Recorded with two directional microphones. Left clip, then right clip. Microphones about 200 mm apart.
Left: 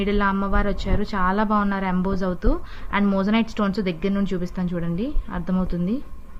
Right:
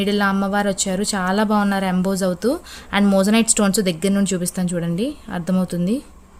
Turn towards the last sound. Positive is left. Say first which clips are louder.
# right 4 dB
turn(degrees=-35)  # may be behind; listen again after turning